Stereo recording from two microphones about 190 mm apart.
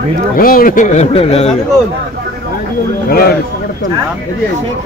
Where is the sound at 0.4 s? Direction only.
50° left (ahead or behind); by 1.6 s 35° left (ahead or behind).